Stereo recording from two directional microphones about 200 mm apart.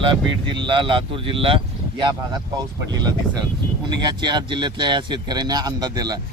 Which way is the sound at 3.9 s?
20° right (ahead or behind).